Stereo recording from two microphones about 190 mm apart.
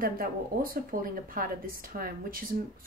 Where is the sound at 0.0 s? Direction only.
50° right (ahead or behind).